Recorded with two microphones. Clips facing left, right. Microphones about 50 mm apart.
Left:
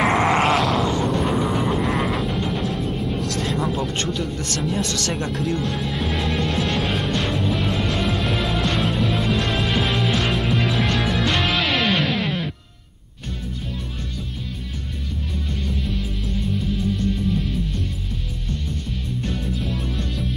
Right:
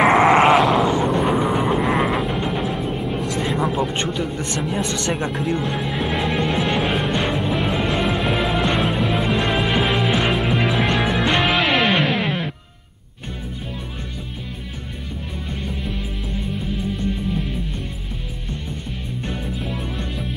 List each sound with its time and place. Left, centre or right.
0.0 s music: centre
3.7 s speech: centre
4.7 s music: centre
15.6 s music: centre
19.4 s music: centre